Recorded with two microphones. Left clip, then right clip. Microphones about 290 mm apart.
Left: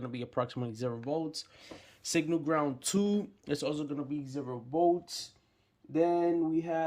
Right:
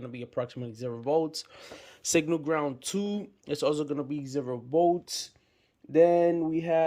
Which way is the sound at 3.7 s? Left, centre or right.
Centre.